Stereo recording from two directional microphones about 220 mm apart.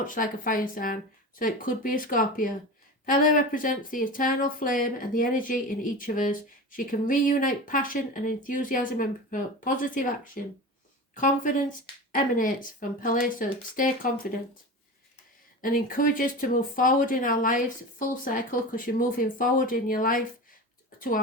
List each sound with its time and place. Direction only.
0.0 s speech: 35° left (ahead or behind)
15.6 s speech: 40° left (ahead or behind)